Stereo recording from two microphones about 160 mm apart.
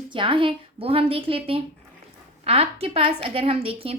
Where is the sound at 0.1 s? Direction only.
30° right (ahead or behind).